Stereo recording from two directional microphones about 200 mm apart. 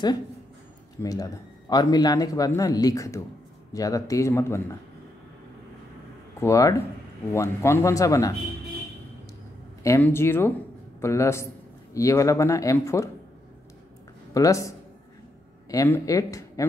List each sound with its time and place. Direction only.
1.0 s speech: 15° left (ahead or behind)
6.4 s speech: 15° left (ahead or behind)
9.8 s speech: 10° left (ahead or behind)
14.3 s speech: 15° left (ahead or behind)
15.7 s speech: 15° left (ahead or behind)